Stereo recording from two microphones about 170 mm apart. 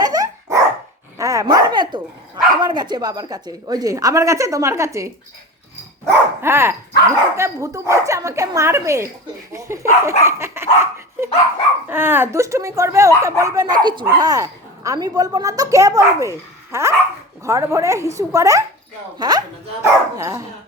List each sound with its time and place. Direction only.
0.0 s dog: 20° right (ahead or behind)
1.2 s speech: 20° right (ahead or behind)